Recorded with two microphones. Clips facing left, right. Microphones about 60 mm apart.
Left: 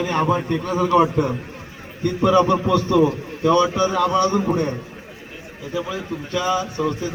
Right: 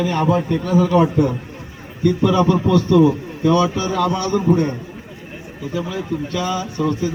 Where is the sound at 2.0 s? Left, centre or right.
Left.